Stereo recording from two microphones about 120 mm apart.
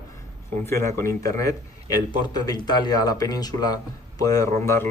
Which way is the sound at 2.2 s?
35° left (ahead or behind).